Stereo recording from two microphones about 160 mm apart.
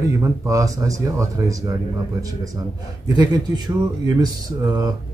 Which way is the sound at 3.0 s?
25° right (ahead or behind).